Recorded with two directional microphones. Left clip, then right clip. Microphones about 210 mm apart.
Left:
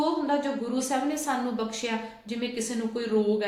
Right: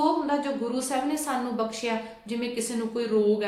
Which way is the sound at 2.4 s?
5° right (ahead or behind).